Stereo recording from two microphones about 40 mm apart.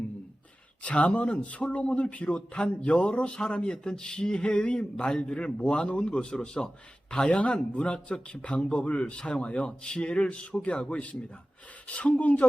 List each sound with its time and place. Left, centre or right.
0.8 s speech: left
3.8 s speech: centre
7.3 s speech: left